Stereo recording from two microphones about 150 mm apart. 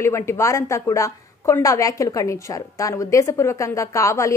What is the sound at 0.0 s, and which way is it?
A woman's voice, 15° left (ahead or behind).